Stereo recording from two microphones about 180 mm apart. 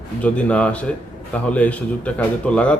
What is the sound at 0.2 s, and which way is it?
Speech, 5° left (ahead or behind).